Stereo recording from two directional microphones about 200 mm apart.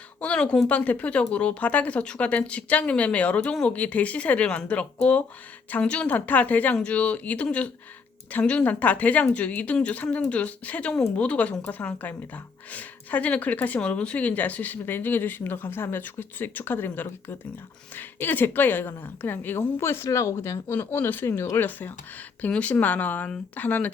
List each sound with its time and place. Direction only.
0.2 s speech: 5° left (ahead or behind)